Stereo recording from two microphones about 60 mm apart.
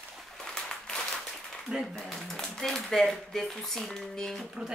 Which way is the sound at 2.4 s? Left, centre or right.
Centre.